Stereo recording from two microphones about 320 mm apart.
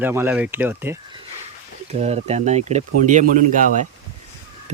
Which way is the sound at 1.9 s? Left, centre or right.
Centre.